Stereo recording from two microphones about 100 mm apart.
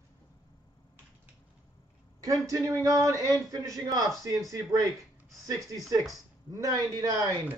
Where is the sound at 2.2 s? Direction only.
35° right (ahead or behind).